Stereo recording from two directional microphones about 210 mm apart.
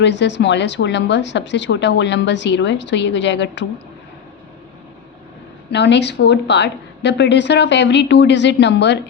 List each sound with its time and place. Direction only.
0.0 s a woman's voice: 55° left (ahead or behind)
5.7 s a woman's voice: 55° left (ahead or behind)